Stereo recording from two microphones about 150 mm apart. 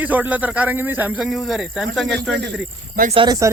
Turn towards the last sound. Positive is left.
turn(degrees=-30)  # may be behind; listen again after turning